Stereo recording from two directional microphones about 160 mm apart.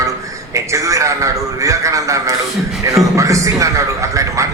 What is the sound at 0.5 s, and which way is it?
A man's voice, 20° right (ahead or behind).